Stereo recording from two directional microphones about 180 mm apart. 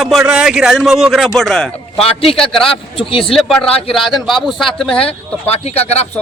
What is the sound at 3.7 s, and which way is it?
Speech, 30° left (ahead or behind).